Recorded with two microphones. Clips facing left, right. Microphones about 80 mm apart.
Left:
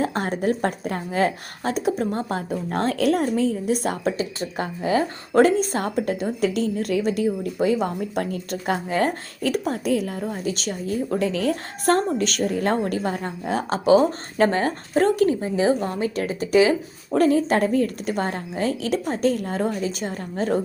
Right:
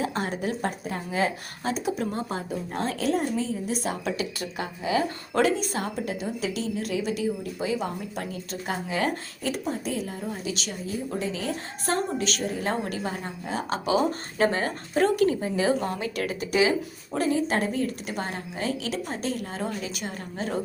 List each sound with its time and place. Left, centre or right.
0.0 s a woman's voice: left
4.0 s speech: left
4.5 s a woman's voice: left
9.4 s a woman's voice: left
10.2 s a woman's voice: left
17.2 s a woman's voice: left